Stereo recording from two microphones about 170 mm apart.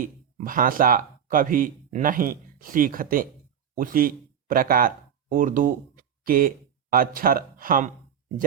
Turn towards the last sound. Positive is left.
turn(degrees=-55)  # may be behind; listen again after turning